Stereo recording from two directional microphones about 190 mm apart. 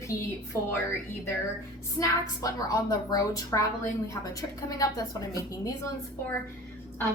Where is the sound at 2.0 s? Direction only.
15° left (ahead or behind).